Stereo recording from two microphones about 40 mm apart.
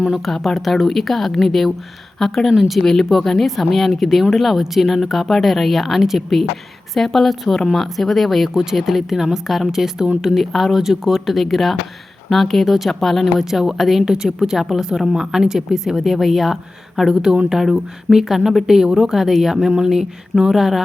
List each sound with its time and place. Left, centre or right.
0.3 s speech: centre
10.4 s speech: centre
13.4 s speech: centre
14.0 s speech: centre
14.3 s speech: centre